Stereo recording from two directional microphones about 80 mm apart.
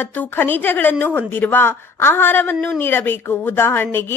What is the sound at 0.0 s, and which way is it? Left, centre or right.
A woman's voice, left.